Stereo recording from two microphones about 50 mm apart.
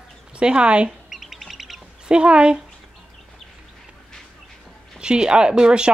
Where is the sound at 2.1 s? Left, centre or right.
Centre.